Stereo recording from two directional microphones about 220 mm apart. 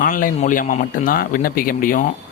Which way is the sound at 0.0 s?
40° left (ahead or behind).